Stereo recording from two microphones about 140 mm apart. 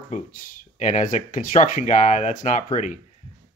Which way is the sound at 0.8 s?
55° left (ahead or behind).